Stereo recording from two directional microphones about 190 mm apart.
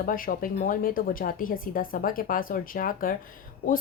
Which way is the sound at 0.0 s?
45° left (ahead or behind).